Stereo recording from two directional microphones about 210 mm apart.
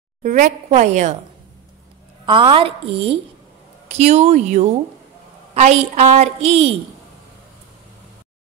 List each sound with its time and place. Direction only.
0.2 s a woman's voice: 35° right (ahead or behind)
2.2 s a woman's voice: 25° right (ahead or behind)